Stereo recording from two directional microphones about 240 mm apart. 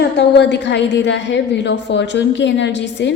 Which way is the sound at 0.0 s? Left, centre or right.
Left.